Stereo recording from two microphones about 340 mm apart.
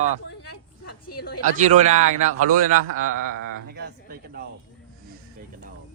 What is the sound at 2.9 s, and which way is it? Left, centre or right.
Speech, right.